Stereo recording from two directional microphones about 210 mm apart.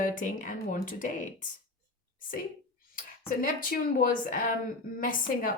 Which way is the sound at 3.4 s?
45° left (ahead or behind).